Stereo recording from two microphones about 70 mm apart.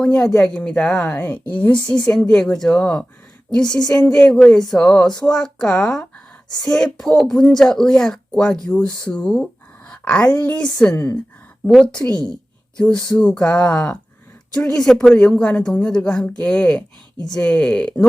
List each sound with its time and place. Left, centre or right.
0.0 s speech: centre
1.0 s speech: left
3.8 s speech: left
4.1 s speech: centre
9.9 s a sound: centre
10.3 s speech: centre